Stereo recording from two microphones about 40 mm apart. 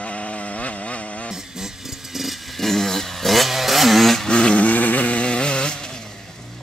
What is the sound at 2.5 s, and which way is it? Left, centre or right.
Chainsaw, centre.